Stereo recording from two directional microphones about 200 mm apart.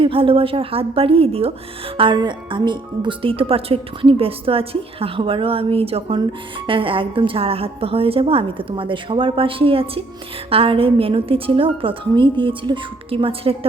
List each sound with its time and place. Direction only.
0.0 s speech: 25° right (ahead or behind)